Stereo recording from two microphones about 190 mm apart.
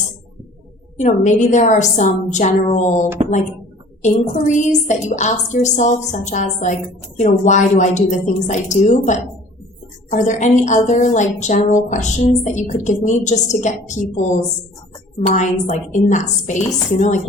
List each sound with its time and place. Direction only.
0.9 s a woman's voice: 40° left (ahead or behind)